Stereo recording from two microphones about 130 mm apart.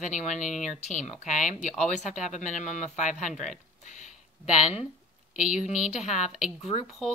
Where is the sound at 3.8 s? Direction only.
70° left (ahead or behind).